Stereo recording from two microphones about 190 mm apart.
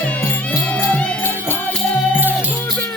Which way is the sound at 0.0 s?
5° left (ahead or behind).